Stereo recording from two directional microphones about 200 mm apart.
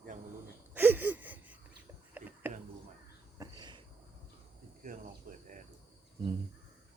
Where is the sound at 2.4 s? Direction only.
10° right (ahead or behind).